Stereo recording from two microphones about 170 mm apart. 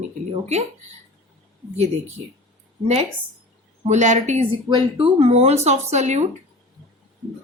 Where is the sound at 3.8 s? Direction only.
45° right (ahead or behind).